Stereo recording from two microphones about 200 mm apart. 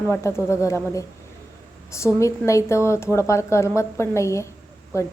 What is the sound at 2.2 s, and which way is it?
A woman's voice, 15° left (ahead or behind).